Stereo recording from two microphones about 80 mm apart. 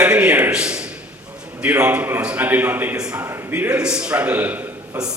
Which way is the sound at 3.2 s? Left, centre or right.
Right.